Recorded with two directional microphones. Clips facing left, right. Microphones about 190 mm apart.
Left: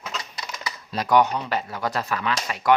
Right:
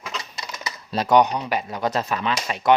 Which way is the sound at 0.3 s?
25° right (ahead or behind).